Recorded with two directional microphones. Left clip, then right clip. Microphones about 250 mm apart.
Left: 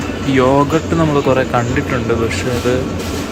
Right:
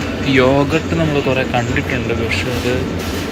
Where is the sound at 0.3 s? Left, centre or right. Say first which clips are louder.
Left 1 dB; centre.